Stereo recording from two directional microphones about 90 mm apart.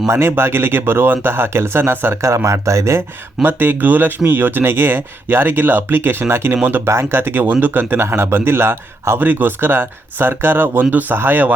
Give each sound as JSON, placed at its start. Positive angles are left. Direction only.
{"t": 0.1, "sound": "speech", "side_deg": -25}
{"t": 3.4, "sound": "speech", "side_deg": -20}